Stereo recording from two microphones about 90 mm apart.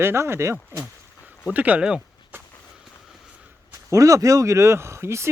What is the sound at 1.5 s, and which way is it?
Speech, 15° right (ahead or behind).